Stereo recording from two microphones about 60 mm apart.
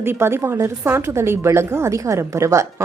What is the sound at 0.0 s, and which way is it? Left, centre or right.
A woman's voice, right.